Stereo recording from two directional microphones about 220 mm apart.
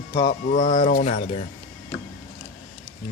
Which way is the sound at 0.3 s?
35° left (ahead or behind).